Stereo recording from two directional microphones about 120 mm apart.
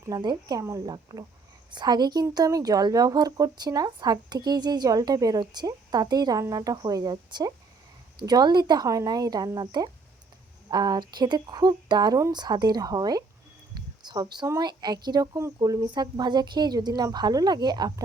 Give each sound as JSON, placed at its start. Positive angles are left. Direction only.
{"t": 0.0, "sound": "speech", "side_deg": -35}
{"t": 13.7, "sound": "a sound", "side_deg": -35}
{"t": 14.6, "sound": "speech", "side_deg": -35}